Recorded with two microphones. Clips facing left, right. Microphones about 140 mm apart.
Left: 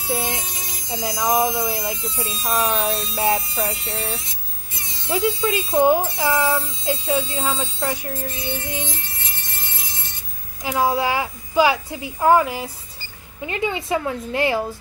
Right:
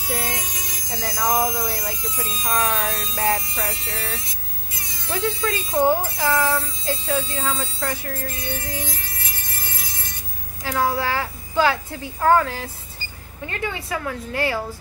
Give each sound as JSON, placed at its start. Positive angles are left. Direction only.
{"t": 0.1, "sound": "speech", "side_deg": 20}
{"t": 4.7, "sound": "buzz", "side_deg": 25}
{"t": 5.1, "sound": "a woman's voice", "side_deg": 15}
{"t": 10.6, "sound": "a woman's voice", "side_deg": 15}